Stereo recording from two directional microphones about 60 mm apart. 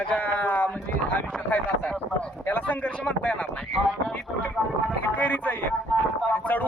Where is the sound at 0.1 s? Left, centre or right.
Left.